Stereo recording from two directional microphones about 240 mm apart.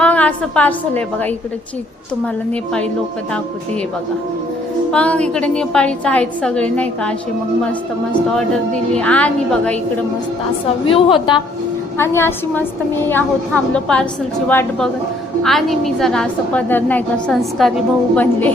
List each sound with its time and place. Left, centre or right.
0.0 s a woman's voice: centre
4.9 s a woman's voice: centre
8.3 s a woman's voice: centre
10.8 s a woman's voice: left